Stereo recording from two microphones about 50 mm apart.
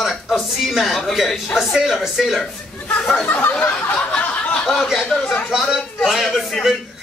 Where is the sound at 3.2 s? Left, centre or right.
Left.